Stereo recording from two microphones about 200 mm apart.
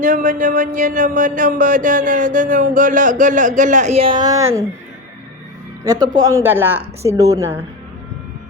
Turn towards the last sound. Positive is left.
turn(degrees=-15)  # may be behind; listen again after turning